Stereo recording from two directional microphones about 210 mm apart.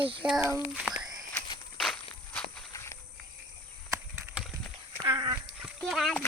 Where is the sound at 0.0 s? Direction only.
25° right (ahead or behind).